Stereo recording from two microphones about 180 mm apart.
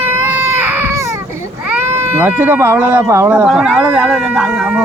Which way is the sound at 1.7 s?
10° right (ahead or behind).